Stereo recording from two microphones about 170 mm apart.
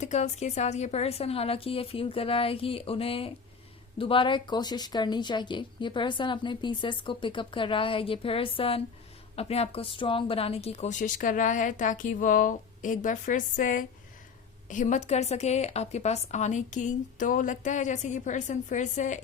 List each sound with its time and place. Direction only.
0.0 s a woman's voice: 40° left (ahead or behind)